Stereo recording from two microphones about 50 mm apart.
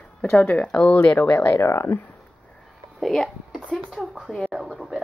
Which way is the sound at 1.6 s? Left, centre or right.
Left.